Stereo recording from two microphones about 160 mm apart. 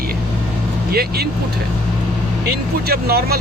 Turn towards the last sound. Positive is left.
turn(degrees=-75)  # may be behind; listen again after turning